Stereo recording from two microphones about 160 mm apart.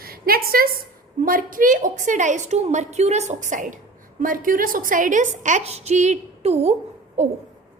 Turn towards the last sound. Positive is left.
turn(degrees=-45)  # may be behind; listen again after turning